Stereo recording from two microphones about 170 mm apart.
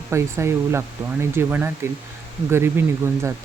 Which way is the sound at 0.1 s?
15° right (ahead or behind).